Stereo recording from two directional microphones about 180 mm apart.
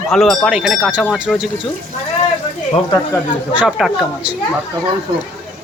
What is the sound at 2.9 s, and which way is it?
Speech, 15° left (ahead or behind).